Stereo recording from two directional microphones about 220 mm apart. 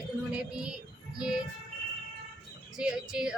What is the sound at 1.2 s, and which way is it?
Speech, 5° right (ahead or behind).